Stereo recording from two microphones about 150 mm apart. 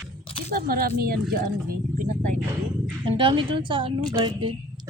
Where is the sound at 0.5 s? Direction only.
80° right.